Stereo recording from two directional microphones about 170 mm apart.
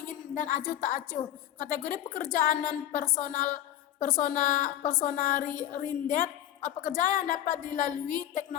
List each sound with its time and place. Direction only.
0.1 s a woman's voice: 50° left (ahead or behind)